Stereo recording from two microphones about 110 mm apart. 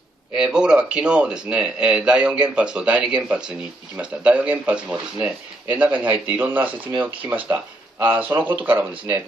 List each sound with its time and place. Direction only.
0.4 s speech: 5° right (ahead or behind)